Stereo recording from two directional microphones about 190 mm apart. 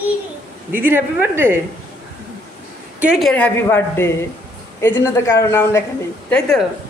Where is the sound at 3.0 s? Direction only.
5° right (ahead or behind); by 5.8 s 15° left (ahead or behind).